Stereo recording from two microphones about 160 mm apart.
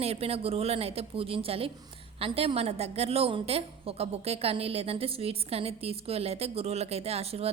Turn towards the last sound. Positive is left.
turn(degrees=-40)  # may be behind; listen again after turning